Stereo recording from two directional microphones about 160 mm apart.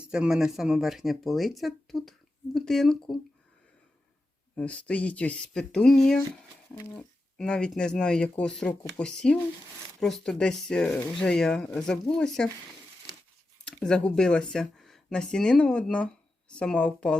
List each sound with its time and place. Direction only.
0.1 s speech: 5° right (ahead or behind)
4.5 s speech: 10° left (ahead or behind)
6.7 s speech: 15° left (ahead or behind)
7.3 s speech: 5° left (ahead or behind)
13.7 s speech: 5° left (ahead or behind)